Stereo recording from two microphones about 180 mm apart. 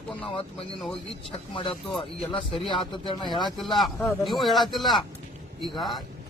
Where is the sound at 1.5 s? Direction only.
30° left (ahead or behind).